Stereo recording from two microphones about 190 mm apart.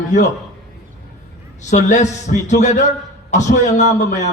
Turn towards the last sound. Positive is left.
turn(degrees=40)  # may be behind; listen again after turning